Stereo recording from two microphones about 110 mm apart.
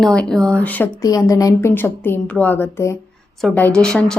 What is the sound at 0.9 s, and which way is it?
Speech, 30° left (ahead or behind).